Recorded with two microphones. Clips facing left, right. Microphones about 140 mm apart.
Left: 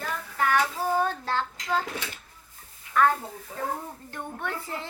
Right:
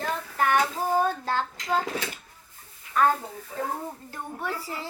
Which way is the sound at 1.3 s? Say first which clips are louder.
Right 1 dB; 15° right (ahead or behind).